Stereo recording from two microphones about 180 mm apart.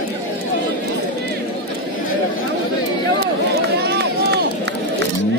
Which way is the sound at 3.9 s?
70° right (ahead or behind).